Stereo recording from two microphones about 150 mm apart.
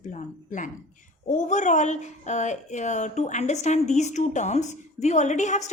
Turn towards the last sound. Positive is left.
turn(degrees=50)  # may be behind; listen again after turning